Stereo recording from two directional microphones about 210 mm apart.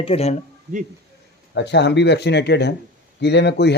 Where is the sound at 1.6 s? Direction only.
55° left (ahead or behind).